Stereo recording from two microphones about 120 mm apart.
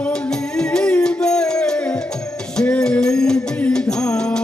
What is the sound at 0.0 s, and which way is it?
Music, 5° left (ahead or behind).